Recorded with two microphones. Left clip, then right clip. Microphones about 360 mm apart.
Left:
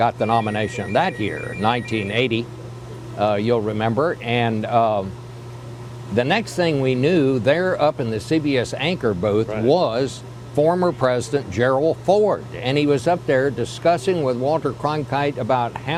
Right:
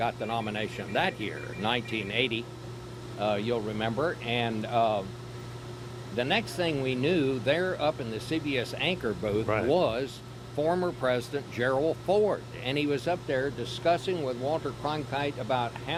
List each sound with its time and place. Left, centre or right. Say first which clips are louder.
0.0 s speech: left 12 dB; left
6.1 s speech: left 9 dB; left
10.6 s speech: left 10 dB; left